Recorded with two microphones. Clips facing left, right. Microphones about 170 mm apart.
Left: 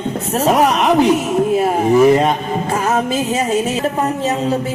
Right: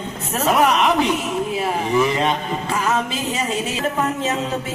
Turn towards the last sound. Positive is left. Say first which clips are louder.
# left 5 dB
turn(degrees=45)  # may be behind; listen again after turning